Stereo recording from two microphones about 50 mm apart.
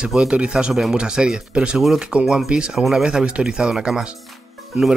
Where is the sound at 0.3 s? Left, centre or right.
Centre.